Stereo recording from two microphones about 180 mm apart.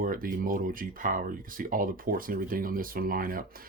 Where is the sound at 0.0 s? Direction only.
50° right (ahead or behind).